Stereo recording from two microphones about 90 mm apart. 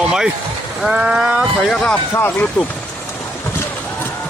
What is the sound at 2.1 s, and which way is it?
Speech, 25° left (ahead or behind).